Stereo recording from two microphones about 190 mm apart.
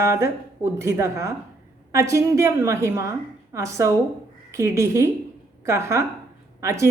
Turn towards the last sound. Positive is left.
turn(degrees=-15)  # may be behind; listen again after turning